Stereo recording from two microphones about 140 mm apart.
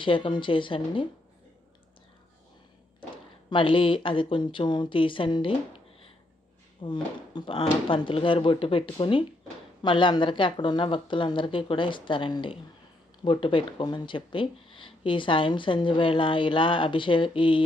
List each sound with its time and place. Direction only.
0.0 s speech: 35° left (ahead or behind)
3.5 s speech: 35° left (ahead or behind)
6.8 s speech: 35° left (ahead or behind)